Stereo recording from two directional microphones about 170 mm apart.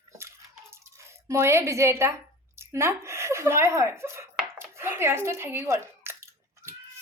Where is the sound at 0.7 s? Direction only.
15° right (ahead or behind).